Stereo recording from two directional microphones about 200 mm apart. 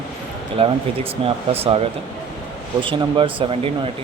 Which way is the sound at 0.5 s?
30° right (ahead or behind).